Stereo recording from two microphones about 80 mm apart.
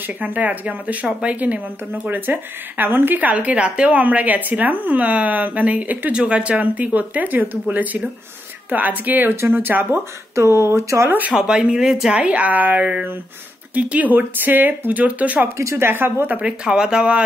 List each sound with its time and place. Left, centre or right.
0.0 s a woman's voice: right
11.1 s a woman's voice: right
11.3 s a woman's voice: centre
15.5 s speech: right
16.3 s speech: centre